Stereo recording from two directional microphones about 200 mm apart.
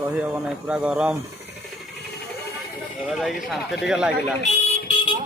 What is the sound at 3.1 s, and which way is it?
Speech, centre (ahead or behind).